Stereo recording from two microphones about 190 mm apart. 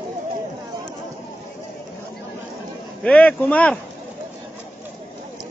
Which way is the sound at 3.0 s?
5° left (ahead or behind).